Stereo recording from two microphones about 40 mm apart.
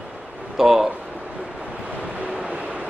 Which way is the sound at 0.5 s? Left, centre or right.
Centre.